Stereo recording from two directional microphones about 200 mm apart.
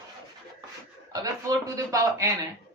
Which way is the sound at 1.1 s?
20° right (ahead or behind).